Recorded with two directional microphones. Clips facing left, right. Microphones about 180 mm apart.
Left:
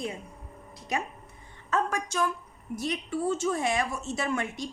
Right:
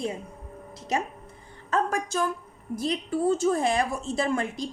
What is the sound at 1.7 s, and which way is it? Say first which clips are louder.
A woman's voice: right 2 dB; 35° right (ahead or behind).